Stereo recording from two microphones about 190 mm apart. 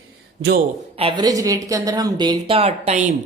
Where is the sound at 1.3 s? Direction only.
20° right (ahead or behind).